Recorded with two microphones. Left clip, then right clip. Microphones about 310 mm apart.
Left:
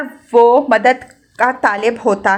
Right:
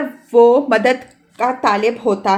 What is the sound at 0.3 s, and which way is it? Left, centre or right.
Speech, centre.